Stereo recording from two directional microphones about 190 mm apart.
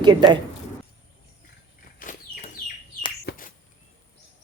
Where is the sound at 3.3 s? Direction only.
65° left (ahead or behind).